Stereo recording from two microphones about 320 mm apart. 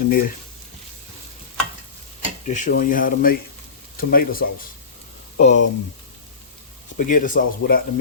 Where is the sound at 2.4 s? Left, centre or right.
Left.